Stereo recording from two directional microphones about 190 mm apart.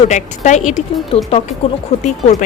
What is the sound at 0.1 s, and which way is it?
Speech, 40° left (ahead or behind).